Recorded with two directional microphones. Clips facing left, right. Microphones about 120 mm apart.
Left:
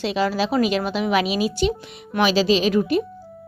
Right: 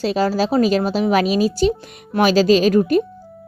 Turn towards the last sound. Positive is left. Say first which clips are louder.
# right 5 dB
turn(degrees=-45)  # may be behind; listen again after turning